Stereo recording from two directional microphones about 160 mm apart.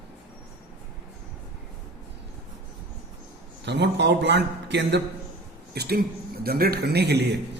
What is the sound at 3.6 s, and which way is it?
A man's voice, 90° right.